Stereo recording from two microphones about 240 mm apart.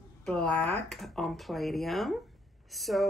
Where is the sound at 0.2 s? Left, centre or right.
Centre.